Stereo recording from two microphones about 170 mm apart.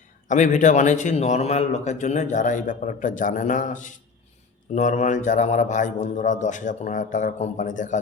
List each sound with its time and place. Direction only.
0.3 s a man's voice: 45° left (ahead or behind)